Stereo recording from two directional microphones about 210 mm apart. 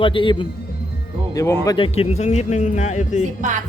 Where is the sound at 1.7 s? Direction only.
25° left (ahead or behind).